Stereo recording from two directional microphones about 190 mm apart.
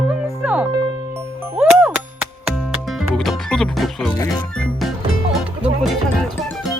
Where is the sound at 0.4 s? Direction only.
5° right (ahead or behind).